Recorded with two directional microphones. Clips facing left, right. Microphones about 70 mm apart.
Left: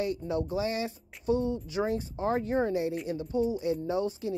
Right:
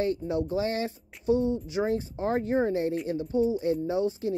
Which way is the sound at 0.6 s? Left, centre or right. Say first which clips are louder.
Right 2 dB; right.